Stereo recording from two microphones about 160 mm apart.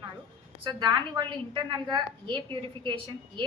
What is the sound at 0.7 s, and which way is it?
A woman's voice, 25° right (ahead or behind).